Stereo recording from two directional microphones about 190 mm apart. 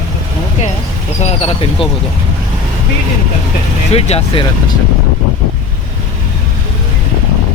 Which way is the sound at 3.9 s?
30° left (ahead or behind).